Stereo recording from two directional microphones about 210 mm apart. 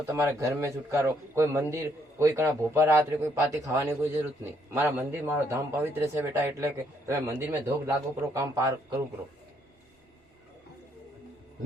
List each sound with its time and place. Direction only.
0.1 s a man's voice: 10° right (ahead or behind)